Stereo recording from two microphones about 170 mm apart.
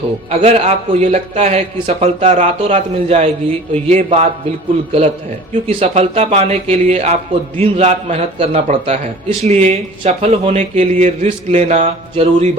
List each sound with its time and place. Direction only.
0.3 s a man's voice: 40° right (ahead or behind)